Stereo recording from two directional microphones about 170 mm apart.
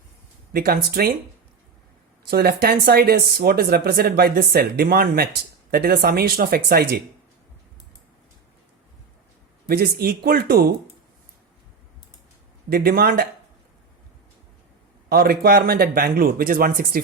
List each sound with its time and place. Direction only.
0.5 s speech: 60° right (ahead or behind)
2.3 s speech: 65° right (ahead or behind)
9.6 s speech: 65° right (ahead or behind)
12.7 s speech: 60° right (ahead or behind)
15.1 s speech: 60° right (ahead or behind)